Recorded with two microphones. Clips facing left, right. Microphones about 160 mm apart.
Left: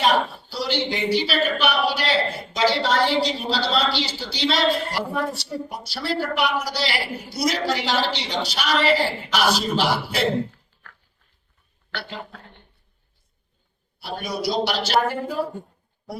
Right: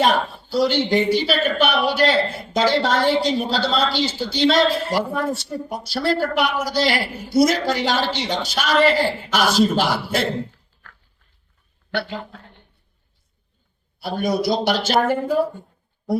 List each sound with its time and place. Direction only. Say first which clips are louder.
0.5 s a man's voice: right 8 dB; 50° right (ahead or behind)
14.0 s a man's voice: right 6 dB; 50° right (ahead or behind)